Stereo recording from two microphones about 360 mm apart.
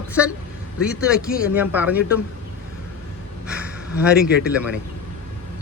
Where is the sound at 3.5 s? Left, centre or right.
Centre.